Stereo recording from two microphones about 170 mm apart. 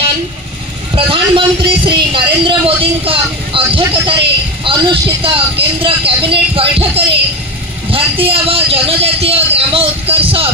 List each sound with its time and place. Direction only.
0.9 s a woman's voice: 30° right (ahead or behind)